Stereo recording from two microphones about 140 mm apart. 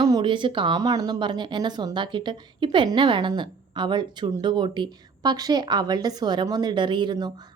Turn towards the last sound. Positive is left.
turn(degrees=-30)  # may be behind; listen again after turning